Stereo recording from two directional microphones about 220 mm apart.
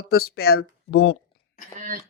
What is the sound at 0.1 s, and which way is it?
Speech, 45° left (ahead or behind).